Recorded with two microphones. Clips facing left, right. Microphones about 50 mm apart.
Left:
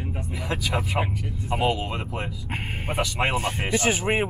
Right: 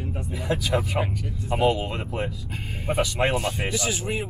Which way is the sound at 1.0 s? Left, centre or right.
Centre.